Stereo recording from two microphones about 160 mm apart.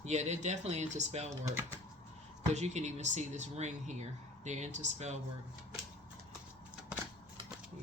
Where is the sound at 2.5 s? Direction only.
45° right (ahead or behind).